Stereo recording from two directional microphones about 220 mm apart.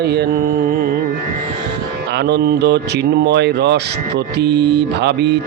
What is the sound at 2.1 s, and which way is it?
Mantra, 50° right (ahead or behind).